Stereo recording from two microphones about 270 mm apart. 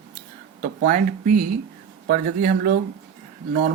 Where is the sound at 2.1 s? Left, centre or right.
Right.